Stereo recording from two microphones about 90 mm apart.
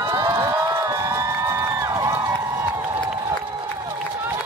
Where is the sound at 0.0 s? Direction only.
35° right (ahead or behind).